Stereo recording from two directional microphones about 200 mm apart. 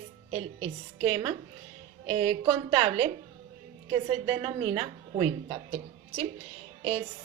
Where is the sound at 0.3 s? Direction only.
30° right (ahead or behind).